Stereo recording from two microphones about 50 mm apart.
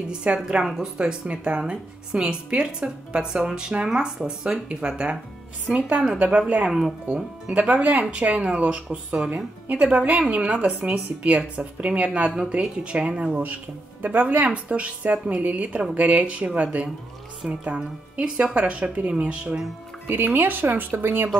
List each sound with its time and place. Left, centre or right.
0.1 s a woman's voice: centre
14.0 s a woman's voice: right
20.1 s speech: right